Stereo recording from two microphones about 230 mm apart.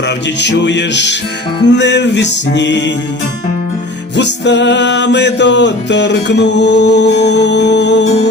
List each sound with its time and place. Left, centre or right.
0.3 s music: left
4.2 s music: left